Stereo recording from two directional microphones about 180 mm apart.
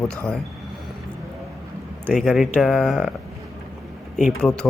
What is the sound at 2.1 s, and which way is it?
Speech, centre (ahead or behind).